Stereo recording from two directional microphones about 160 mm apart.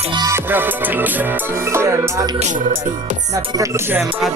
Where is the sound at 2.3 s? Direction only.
50° right (ahead or behind).